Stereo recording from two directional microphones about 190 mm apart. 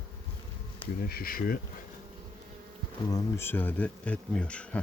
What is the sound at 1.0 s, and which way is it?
Speech, 50° left (ahead or behind).